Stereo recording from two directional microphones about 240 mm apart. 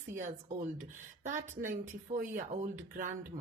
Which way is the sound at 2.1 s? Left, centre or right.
Right.